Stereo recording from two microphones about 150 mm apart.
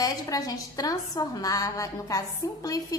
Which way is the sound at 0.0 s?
25° left (ahead or behind).